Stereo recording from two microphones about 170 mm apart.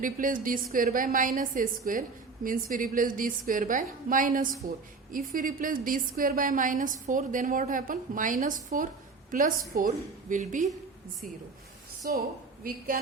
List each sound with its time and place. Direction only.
0.0 s a woman's voice: 50° right (ahead or behind)
12.0 s a woman's voice: 60° right (ahead or behind)